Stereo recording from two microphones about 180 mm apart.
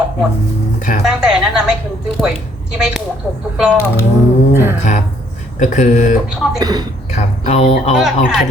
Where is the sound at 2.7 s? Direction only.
5° right (ahead or behind).